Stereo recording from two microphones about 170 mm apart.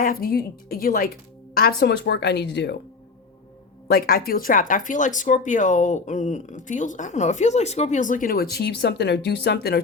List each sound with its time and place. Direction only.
0.0 s speech: 60° left (ahead or behind); by 2.8 s 90° left
3.8 s speech: 65° left (ahead or behind)